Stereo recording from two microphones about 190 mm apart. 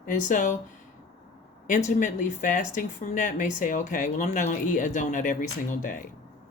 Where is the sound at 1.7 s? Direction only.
40° left (ahead or behind).